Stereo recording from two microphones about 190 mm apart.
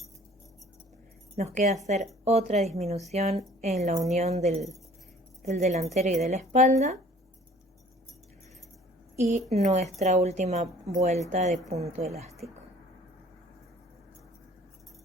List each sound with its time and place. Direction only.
1.4 s a woman's voice: 35° right (ahead or behind)
9.1 s a woman's voice: 35° right (ahead or behind)